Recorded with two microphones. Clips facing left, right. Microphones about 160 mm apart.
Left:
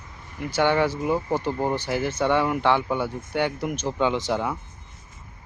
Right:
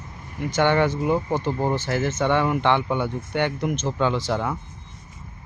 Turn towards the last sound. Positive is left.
turn(degrees=15)  # may be behind; listen again after turning